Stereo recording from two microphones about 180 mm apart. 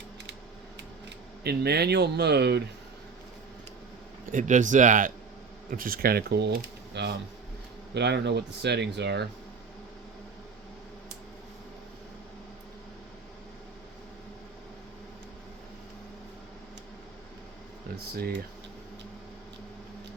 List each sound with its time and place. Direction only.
1.5 s speech: 65° right (ahead or behind)
4.3 s speech: 45° right (ahead or behind); by 9.2 s 70° right (ahead or behind)
17.9 s speech: 55° right (ahead or behind)